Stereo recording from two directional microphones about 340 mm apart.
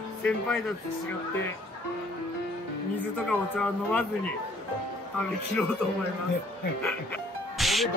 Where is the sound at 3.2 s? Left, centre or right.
Centre.